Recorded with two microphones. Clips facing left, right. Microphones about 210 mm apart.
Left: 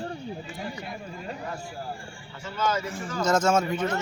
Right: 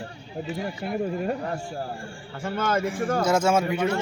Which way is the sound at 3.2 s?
10° right (ahead or behind).